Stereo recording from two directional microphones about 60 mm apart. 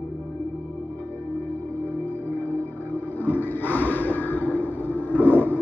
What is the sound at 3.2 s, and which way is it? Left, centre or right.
Music, left.